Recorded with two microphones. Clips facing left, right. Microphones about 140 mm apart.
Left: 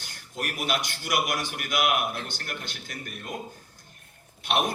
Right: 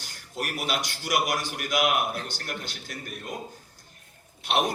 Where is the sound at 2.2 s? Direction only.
50° left (ahead or behind).